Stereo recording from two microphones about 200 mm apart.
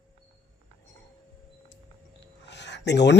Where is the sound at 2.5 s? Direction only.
60° left (ahead or behind).